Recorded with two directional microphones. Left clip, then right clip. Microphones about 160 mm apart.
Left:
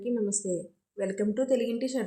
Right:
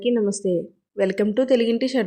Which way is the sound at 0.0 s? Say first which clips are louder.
Right 9 dB; 50° right (ahead or behind).